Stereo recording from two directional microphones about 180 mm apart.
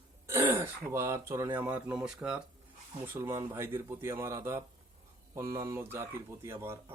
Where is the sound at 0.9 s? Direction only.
15° right (ahead or behind).